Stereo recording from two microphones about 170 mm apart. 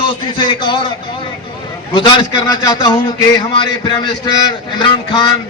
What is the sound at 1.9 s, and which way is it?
A man's voice, 30° left (ahead or behind).